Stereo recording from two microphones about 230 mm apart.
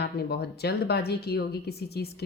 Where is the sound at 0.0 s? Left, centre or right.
Left.